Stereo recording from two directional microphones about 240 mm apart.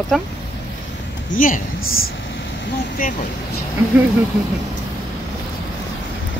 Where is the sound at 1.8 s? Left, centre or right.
Left.